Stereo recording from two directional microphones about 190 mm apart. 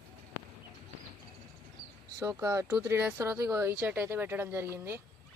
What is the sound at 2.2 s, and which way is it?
Speech, 15° right (ahead or behind).